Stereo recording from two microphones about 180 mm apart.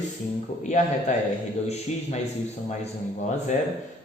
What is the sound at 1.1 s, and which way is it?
A man's voice, 40° left (ahead or behind).